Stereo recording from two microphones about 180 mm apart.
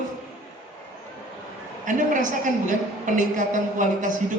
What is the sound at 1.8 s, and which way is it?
Speech, 45° right (ahead or behind).